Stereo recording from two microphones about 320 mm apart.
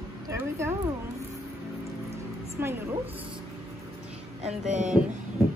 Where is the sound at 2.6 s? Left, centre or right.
Centre.